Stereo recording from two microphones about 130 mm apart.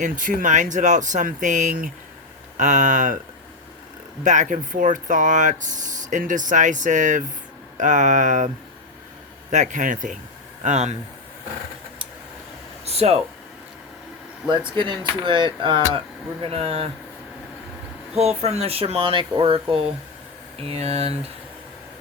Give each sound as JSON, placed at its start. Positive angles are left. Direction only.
{"t": 0.0, "sound": "speech", "side_deg": -90}
{"t": 2.6, "sound": "speech", "side_deg": -75}
{"t": 4.2, "sound": "speech", "side_deg": -75}
{"t": 9.5, "sound": "speech", "side_deg": -70}
{"t": 10.6, "sound": "speech", "side_deg": -65}
{"t": 12.8, "sound": "a sound", "side_deg": -50}
{"t": 14.7, "sound": "speech", "side_deg": -35}
{"t": 18.1, "sound": "speech", "side_deg": -55}